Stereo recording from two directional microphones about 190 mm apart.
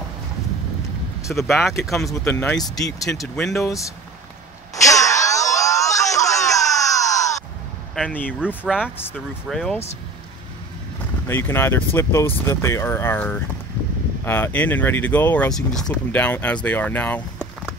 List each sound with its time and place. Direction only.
1.3 s speech: centre (ahead or behind)
3.1 s speech: 5° left (ahead or behind)
4.8 s a sound: 15° left (ahead or behind)
7.9 s speech: 5° left (ahead or behind)
8.6 s speech: 5° right (ahead or behind)
11.2 s speech: 10° left (ahead or behind)